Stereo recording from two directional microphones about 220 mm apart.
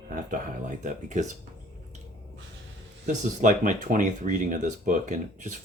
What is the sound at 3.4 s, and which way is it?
Speech, 35° right (ahead or behind).